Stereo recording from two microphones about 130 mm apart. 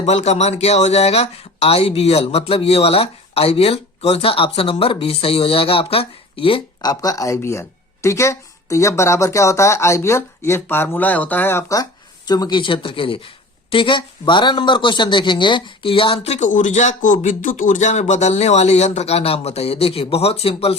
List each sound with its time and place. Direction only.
0.0 s speech: 60° left (ahead or behind)
6.8 s speech: 25° left (ahead or behind)
11.8 s speech: 30° left (ahead or behind); by 20.7 s 50° left (ahead or behind)